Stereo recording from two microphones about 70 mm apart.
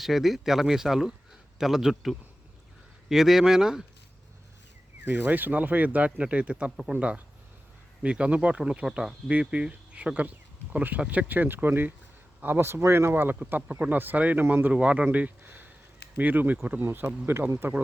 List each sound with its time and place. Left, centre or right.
0.0 s speech: centre
5.0 s speech: right
14.7 s speech: centre; by 17.7 s right